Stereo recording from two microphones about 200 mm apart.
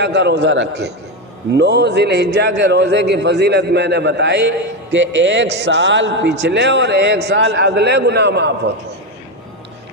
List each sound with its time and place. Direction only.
0.0 s a man's voice: 60° right (ahead or behind)